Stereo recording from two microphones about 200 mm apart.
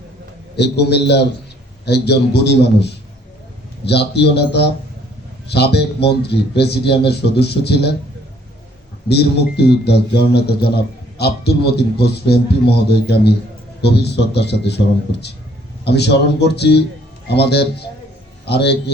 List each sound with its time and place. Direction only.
0.5 s a man's voice: 55° left (ahead or behind)
9.0 s a man's voice: 55° left (ahead or behind)
15.8 s a man's voice: 55° left (ahead or behind)